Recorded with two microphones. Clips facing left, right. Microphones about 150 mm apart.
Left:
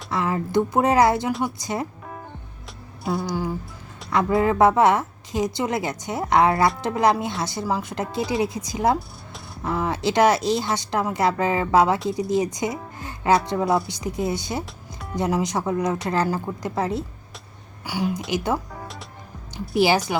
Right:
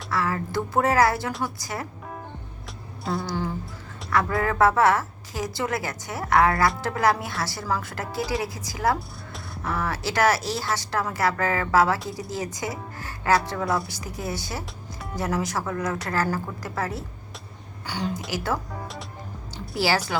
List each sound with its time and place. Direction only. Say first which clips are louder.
0.1 s speech: left 4 dB; 20° left (ahead or behind)
3.0 s a sound: left 3 dB; centre (ahead or behind)
3.2 s speech: left 2 dB; 10° left (ahead or behind)
4.1 s speech: left 4 dB; 20° left (ahead or behind)
14.6 s music: left 1 dB; centre (ahead or behind)
15.1 s speech: left 4 dB; 20° left (ahead or behind)
19.7 s speech: left 5 dB; 20° left (ahead or behind)